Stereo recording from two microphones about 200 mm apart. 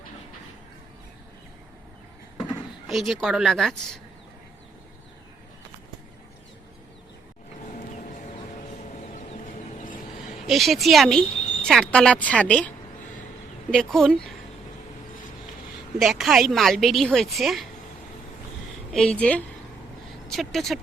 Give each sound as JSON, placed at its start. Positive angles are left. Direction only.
{"t": 2.4, "sound": "speech", "side_deg": 0}
{"t": 9.1, "sound": "a sound", "side_deg": 35}
{"t": 10.4, "sound": "a woman's voice", "side_deg": 0}
{"t": 16.0, "sound": "a woman's voice", "side_deg": 0}
{"t": 18.9, "sound": "speech", "side_deg": 5}